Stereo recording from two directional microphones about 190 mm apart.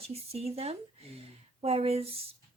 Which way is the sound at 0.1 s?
30° right (ahead or behind).